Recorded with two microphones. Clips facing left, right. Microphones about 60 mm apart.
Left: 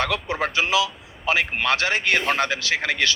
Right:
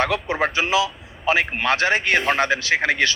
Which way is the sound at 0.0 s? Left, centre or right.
Right.